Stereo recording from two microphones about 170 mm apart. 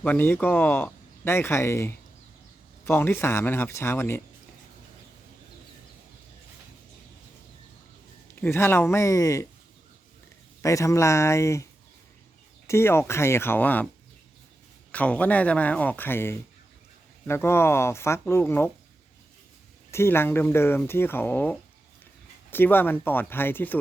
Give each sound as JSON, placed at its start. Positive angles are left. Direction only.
{"t": 0.0, "sound": "speech", "side_deg": 10}
{"t": 8.4, "sound": "speech", "side_deg": 15}
{"t": 10.6, "sound": "speech", "side_deg": 20}
{"t": 14.9, "sound": "speech", "side_deg": 10}
{"t": 19.9, "sound": "speech", "side_deg": 15}